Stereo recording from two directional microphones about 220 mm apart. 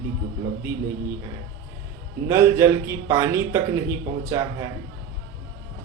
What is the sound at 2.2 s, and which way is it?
A man's voice, 15° right (ahead or behind).